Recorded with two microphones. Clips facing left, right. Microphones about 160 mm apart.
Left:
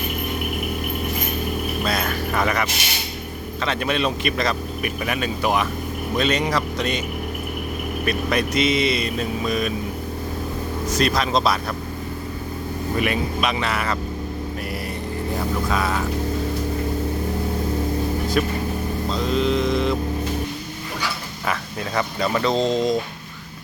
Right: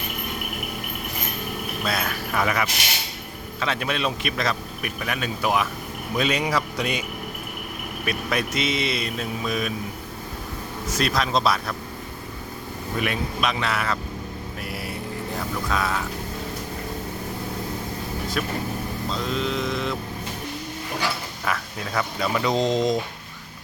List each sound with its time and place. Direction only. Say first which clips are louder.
1.8 s speech: left 1 dB; centre (ahead or behind)
8.0 s speech: left 3 dB; centre (ahead or behind)
10.9 s speech: left 2 dB; centre (ahead or behind)
13.0 s speech: left 3 dB; centre (ahead or behind)
15.7 s speech: even; centre (ahead or behind)
18.4 s speech: left 6 dB; centre (ahead or behind)
19.1 s a sound: left 6 dB; centre (ahead or behind)
21.4 s speech: left 3 dB; centre (ahead or behind)
22.4 s speech: left 1 dB; 15° right (ahead or behind)